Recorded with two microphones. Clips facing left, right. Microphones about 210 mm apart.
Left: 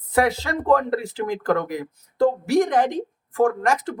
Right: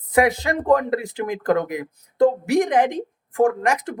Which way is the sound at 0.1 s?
15° right (ahead or behind).